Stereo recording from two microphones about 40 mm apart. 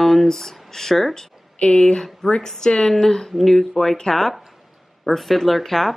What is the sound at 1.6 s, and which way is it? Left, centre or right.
Speech, left.